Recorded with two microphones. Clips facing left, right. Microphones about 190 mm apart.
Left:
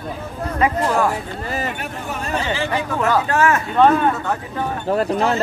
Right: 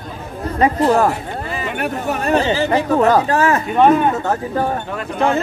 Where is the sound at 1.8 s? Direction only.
65° right (ahead or behind).